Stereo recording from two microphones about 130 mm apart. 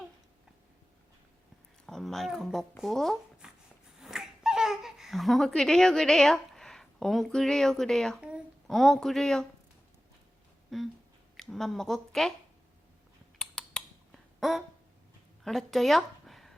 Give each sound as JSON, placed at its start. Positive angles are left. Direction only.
{"t": 1.9, "sound": "a woman's voice", "side_deg": 5}
{"t": 10.7, "sound": "speech", "side_deg": 0}
{"t": 13.4, "sound": "a sound", "side_deg": 5}
{"t": 15.4, "sound": "speech", "side_deg": 0}